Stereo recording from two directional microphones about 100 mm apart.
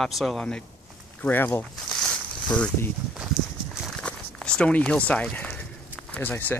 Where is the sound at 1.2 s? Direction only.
20° left (ahead or behind).